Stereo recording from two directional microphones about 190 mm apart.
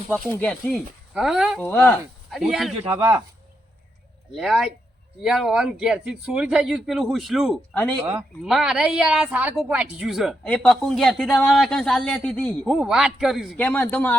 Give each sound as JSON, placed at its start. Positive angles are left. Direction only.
{"t": 0.1, "sound": "a woman's voice", "side_deg": 10}
{"t": 2.9, "sound": "speech", "side_deg": -15}
{"t": 4.4, "sound": "a woman's voice", "side_deg": 0}